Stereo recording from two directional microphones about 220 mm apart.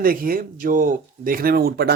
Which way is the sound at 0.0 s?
40° right (ahead or behind).